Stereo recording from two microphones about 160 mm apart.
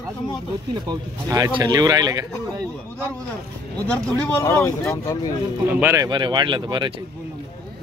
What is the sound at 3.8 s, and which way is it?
Speech, 5° left (ahead or behind).